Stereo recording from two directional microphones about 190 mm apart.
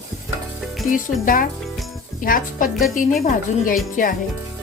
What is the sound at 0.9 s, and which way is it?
Music, 45° left (ahead or behind).